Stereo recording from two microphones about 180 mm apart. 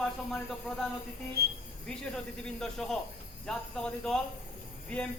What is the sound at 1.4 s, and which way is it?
Speech, 60° right (ahead or behind).